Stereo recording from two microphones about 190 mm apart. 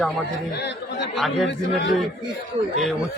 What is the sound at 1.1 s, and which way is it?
Speech, centre (ahead or behind).